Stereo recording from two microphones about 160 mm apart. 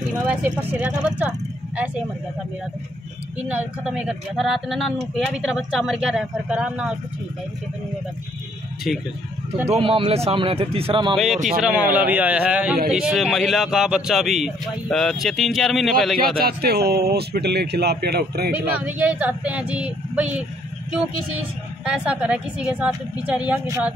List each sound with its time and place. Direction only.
0.1 s a woman's voice: 10° right (ahead or behind)
3.3 s speech: 10° right (ahead or behind)
9.7 s speech: 35° right (ahead or behind)
11.5 s a woman's voice: 5° right (ahead or behind)
16.3 s speech: 75° right (ahead or behind)
18.5 s a woman's voice: 10° right (ahead or behind)
21.8 s a woman's voice: 5° right (ahead or behind)